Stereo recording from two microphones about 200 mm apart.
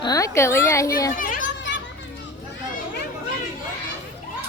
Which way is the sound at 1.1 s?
45° left (ahead or behind).